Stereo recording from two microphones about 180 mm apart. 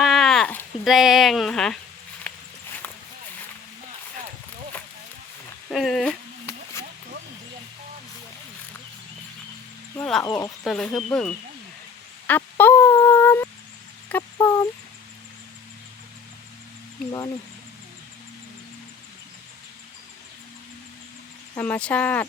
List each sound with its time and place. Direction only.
0.0 s a sound: centre (ahead or behind)
2.3 s walk: 10° left (ahead or behind)
5.7 s speech: centre (ahead or behind)
10.2 s speech: 25° left (ahead or behind)
10.6 s speech: centre (ahead or behind)
12.3 s a sound: 10° left (ahead or behind)
21.5 s speech: 10° left (ahead or behind)